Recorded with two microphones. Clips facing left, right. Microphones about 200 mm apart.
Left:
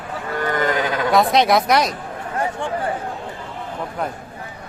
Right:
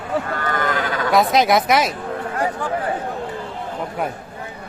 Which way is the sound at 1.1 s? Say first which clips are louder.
Even; centre (ahead or behind).